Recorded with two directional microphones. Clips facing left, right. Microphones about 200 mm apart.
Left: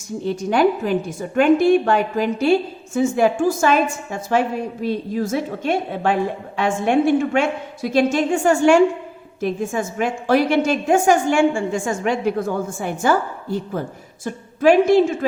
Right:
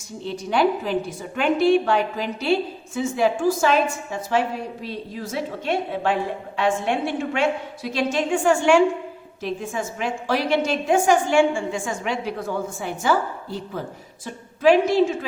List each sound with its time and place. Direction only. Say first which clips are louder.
0.3 s a woman's voice: left 4 dB; 45° left (ahead or behind)